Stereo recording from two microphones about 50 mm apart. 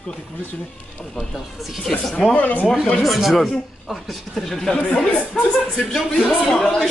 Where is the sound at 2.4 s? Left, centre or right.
Left.